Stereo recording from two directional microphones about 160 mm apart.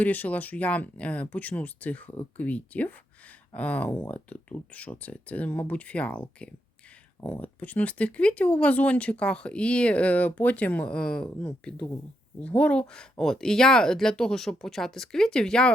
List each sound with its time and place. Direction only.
0.0 s speech: 10° left (ahead or behind)